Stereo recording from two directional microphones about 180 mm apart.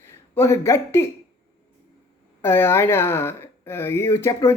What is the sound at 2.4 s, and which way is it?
Speech, 15° left (ahead or behind).